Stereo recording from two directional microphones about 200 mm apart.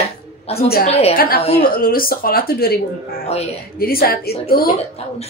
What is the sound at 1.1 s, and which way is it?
Speech, 45° left (ahead or behind).